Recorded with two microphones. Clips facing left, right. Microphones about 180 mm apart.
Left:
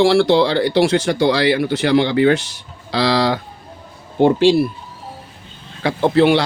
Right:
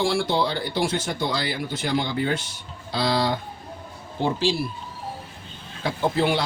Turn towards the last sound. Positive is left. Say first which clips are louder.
# left 9 dB
turn(degrees=75)  # may be behind; listen again after turning